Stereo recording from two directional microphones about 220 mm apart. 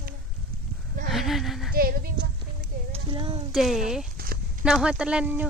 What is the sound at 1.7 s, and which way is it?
Speech, 40° right (ahead or behind).